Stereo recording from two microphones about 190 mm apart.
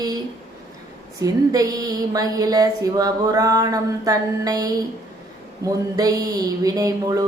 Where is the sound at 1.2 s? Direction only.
20° right (ahead or behind).